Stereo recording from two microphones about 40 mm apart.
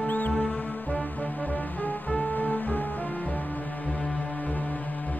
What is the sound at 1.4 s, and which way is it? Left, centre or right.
Music, left.